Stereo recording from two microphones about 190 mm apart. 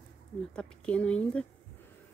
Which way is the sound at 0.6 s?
5° left (ahead or behind).